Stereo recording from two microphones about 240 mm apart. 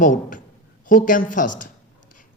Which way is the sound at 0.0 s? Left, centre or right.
Left.